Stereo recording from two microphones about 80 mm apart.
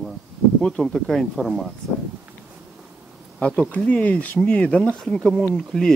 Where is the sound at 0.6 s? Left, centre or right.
Centre.